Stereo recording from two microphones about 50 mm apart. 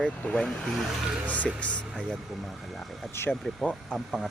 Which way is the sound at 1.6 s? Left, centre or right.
Left.